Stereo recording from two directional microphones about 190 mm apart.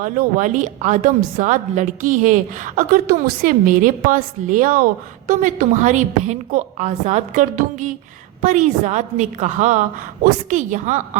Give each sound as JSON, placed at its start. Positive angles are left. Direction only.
{"t": 0.0, "sound": "a woman's voice", "side_deg": -45}